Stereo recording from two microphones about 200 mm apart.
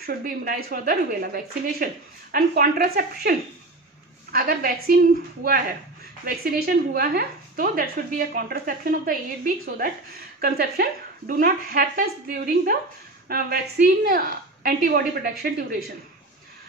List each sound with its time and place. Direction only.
0.0 s a woman's voice: 45° right (ahead or behind)
6.2 s a woman's voice: 50° right (ahead or behind)